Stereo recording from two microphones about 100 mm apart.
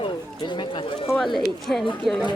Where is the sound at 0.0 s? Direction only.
50° left (ahead or behind).